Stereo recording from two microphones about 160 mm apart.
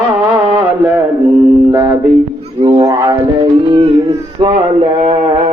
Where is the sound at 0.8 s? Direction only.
10° right (ahead or behind).